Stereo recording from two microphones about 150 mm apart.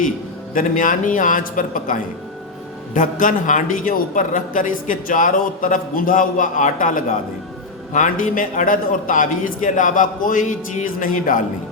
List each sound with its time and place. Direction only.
0.5 s a man's voice: 60° left (ahead or behind)